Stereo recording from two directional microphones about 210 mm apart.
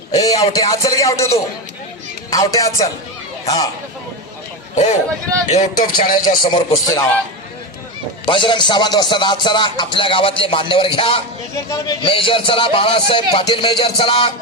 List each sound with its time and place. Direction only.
0.1 s music: 15° left (ahead or behind)
3.4 s a man's voice: 20° left (ahead or behind)
5.5 s speech: 30° left (ahead or behind)
6.4 s music: 20° left (ahead or behind)
8.2 s music: 25° left (ahead or behind)